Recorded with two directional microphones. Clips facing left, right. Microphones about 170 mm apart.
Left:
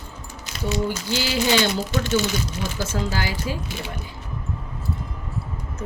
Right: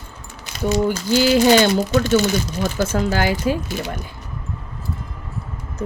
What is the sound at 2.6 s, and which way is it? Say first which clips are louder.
Speech: right 9 dB; 55° right (ahead or behind).